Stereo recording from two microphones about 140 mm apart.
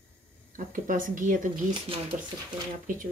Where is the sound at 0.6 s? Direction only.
70° right (ahead or behind).